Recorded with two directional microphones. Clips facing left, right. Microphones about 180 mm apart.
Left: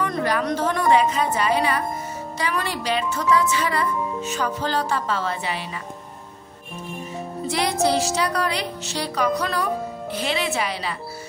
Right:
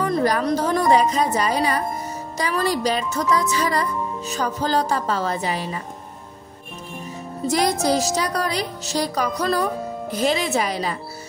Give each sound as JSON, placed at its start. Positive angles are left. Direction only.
{"t": 0.0, "sound": "speech", "side_deg": -35}
{"t": 7.4, "sound": "speech", "side_deg": -40}